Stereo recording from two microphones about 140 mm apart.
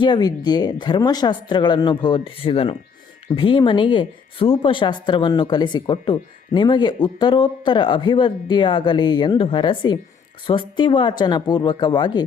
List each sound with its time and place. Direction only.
0.0 s speech: 30° left (ahead or behind)